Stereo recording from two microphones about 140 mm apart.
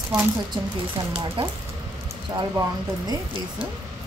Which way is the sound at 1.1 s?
40° right (ahead or behind).